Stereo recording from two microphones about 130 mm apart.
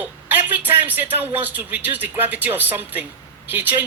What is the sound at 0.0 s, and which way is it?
A man's voice, 15° right (ahead or behind).